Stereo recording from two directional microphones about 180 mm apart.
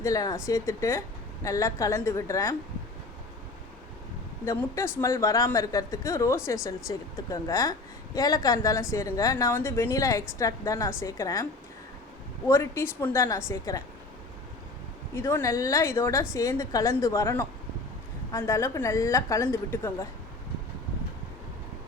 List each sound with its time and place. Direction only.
0.0 s a woman's voice: 20° left (ahead or behind)
4.4 s a woman's voice: 15° left (ahead or behind)
12.5 s a woman's voice: 15° left (ahead or behind)
15.1 s a woman's voice: 15° left (ahead or behind)